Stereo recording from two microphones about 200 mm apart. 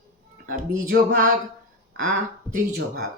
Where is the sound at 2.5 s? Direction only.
55° right (ahead or behind).